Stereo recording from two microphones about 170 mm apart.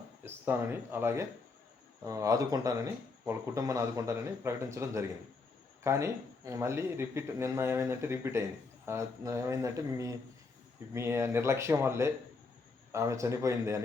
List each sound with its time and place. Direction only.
0.3 s speech: 10° right (ahead or behind)